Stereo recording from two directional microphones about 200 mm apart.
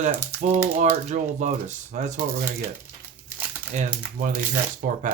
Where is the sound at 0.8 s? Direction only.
35° right (ahead or behind).